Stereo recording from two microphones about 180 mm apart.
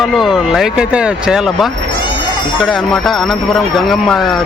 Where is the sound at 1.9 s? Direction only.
25° left (ahead or behind).